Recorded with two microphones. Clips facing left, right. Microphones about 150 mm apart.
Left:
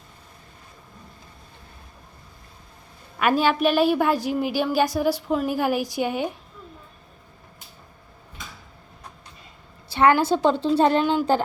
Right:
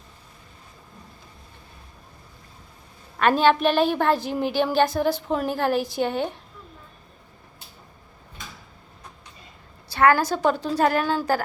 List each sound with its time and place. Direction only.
3.2 s a woman's voice: 10° left (ahead or behind)
9.9 s a woman's voice: 20° left (ahead or behind)